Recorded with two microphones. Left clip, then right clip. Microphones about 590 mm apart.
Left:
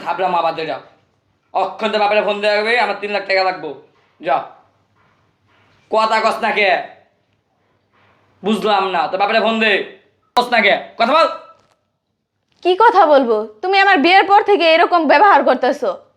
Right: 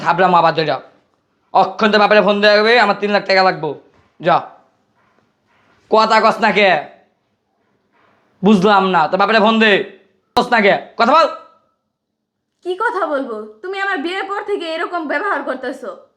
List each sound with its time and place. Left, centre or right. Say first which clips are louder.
0.0 s a man's voice: right 5 dB; right
5.9 s a man's voice: right 3 dB; right
8.4 s a man's voice: right 4 dB; right
10.5 s speech: right 2 dB; right
12.7 s a woman's voice: left 8 dB; left